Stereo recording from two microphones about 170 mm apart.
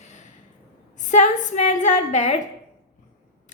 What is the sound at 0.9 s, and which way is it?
A woman's voice, 45° left (ahead or behind).